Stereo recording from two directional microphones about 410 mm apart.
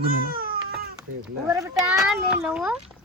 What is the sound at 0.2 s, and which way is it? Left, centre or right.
Baby cry, right.